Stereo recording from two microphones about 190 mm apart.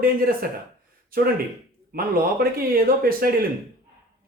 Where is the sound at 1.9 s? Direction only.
50° right (ahead or behind).